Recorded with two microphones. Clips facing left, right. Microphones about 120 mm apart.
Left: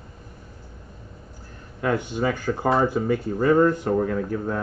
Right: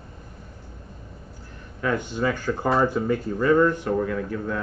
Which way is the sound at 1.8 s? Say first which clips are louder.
Left 1 dB; 10° left (ahead or behind).